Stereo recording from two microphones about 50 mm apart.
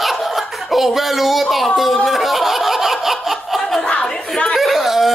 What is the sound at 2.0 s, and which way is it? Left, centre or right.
Snicker, centre.